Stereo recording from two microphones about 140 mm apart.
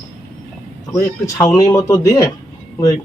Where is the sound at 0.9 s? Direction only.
25° left (ahead or behind).